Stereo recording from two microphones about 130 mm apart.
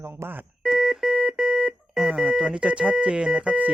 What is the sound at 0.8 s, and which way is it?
Speech, 5° right (ahead or behind).